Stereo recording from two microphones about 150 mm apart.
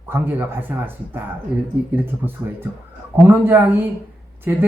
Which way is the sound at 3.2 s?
15° right (ahead or behind).